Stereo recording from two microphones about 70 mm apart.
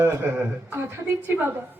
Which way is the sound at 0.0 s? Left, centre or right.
Right.